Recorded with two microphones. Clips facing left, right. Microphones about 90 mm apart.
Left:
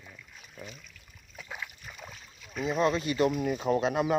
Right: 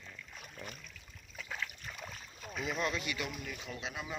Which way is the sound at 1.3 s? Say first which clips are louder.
Left 1 dB; 15° left (ahead or behind).